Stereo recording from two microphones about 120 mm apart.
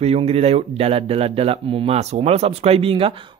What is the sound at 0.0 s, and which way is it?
Speech, 55° right (ahead or behind).